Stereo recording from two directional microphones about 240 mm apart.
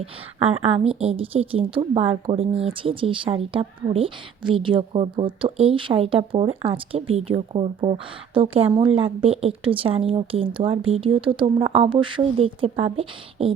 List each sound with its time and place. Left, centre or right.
0.0 s a woman's voice: right